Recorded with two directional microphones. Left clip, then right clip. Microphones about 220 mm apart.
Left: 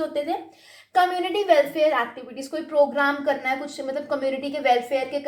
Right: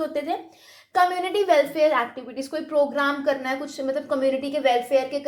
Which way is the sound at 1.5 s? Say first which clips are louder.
Left 1 dB; 25° right (ahead or behind).